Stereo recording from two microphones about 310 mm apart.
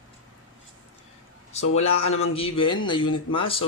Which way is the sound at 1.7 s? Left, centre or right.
Centre.